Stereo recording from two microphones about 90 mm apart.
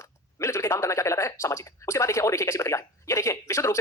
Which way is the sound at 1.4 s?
35° left (ahead or behind).